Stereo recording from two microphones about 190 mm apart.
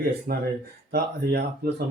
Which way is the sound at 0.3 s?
50° right (ahead or behind).